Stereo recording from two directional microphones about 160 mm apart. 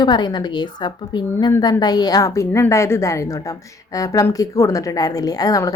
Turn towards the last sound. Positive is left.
turn(degrees=20)  # may be behind; listen again after turning